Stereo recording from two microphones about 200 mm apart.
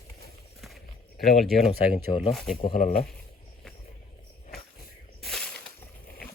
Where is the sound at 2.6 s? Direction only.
30° left (ahead or behind).